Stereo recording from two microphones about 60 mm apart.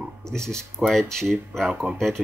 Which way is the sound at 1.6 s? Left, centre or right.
Centre.